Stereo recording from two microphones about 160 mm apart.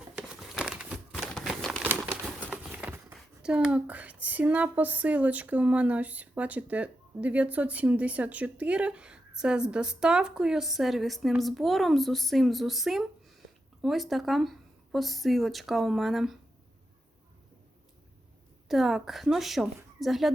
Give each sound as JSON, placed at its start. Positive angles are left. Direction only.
{"t": 0.2, "sound": "crumpling", "side_deg": 0}
{"t": 1.1, "sound": "typewriter", "side_deg": 0}
{"t": 1.8, "sound": "crumpling", "side_deg": -10}
{"t": 2.2, "sound": "clip-clop", "side_deg": -5}
{"t": 3.4, "sound": "speech", "side_deg": -5}
{"t": 18.7, "sound": "speech", "side_deg": 0}